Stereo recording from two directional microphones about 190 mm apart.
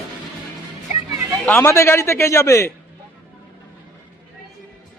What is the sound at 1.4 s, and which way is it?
Speech, 10° left (ahead or behind).